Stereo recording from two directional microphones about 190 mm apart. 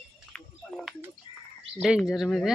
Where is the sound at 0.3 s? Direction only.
Centre (ahead or behind).